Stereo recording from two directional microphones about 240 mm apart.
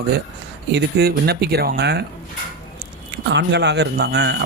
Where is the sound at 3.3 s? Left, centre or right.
Right.